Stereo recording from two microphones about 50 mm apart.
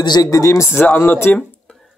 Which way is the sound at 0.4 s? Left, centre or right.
Left.